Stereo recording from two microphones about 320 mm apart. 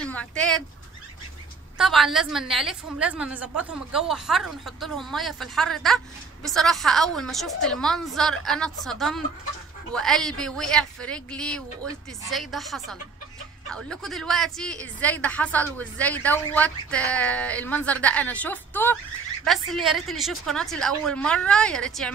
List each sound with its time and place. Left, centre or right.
0.0 s speech: centre
1.8 s a woman's voice: centre